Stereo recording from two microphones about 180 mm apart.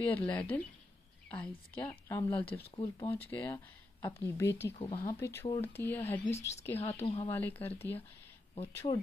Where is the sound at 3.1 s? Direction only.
10° left (ahead or behind).